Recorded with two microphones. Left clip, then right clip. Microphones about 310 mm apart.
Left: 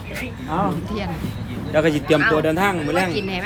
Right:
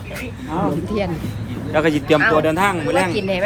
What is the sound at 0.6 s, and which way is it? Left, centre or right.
Speech, centre.